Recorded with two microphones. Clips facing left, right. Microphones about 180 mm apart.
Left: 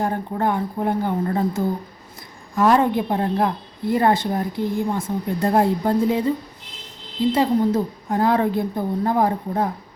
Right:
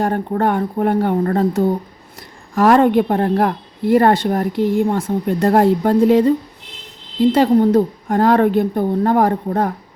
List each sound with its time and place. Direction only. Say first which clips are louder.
0.0 s speech: right 5 dB; 70° right (ahead or behind)